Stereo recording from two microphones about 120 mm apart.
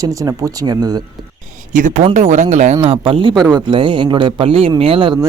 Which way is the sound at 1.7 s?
90° right.